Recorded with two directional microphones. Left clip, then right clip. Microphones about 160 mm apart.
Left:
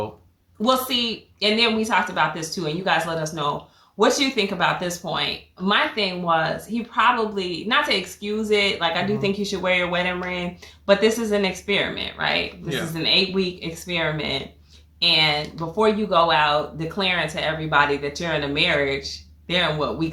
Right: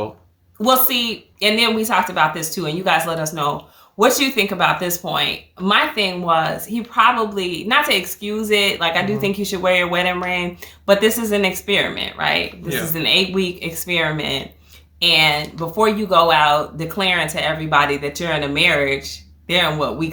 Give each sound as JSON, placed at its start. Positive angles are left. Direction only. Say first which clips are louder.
{"t": 0.6, "sound": "speech", "louder": "right 4 dB", "side_deg": -25}